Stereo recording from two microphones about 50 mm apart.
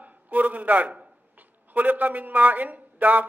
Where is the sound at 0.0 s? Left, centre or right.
Right.